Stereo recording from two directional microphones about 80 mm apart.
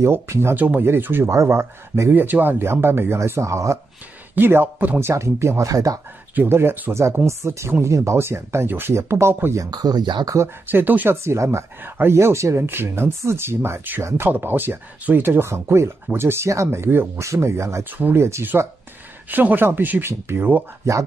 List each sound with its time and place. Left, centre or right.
0.0 s speech: right
0.6 s speech: right
4.4 s speech: right
5.1 s speech: right
6.3 s speech: right
9.6 s speech: right
10.2 s speech: right
10.7 s speech: right
11.2 s speech: right
17.9 s speech: right